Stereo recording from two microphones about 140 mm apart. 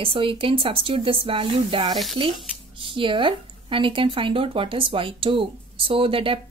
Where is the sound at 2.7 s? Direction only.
40° right (ahead or behind).